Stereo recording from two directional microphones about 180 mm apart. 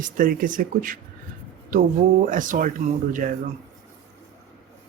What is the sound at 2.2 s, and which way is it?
Speech, 50° right (ahead or behind).